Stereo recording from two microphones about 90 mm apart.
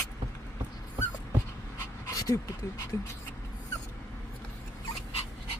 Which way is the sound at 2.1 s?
35° left (ahead or behind).